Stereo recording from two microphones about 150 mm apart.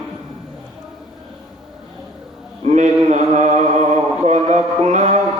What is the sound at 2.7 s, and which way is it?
Mantra, 50° right (ahead or behind).